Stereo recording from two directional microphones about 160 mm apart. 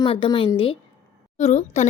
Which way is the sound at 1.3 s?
45° left (ahead or behind).